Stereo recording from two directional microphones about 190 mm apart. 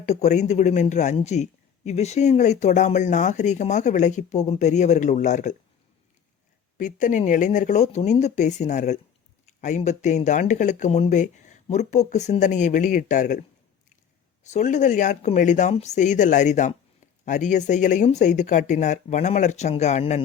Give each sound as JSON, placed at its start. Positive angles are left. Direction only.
{"t": 0.0, "sound": "a man's voice", "side_deg": 40}
{"t": 6.7, "sound": "a man's voice", "side_deg": 40}
{"t": 14.5, "sound": "a man's voice", "side_deg": 40}